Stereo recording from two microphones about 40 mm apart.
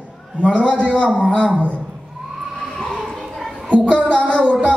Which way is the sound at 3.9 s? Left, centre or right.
Left.